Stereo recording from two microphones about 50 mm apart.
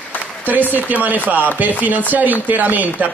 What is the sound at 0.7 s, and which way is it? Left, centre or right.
A man's voice, right.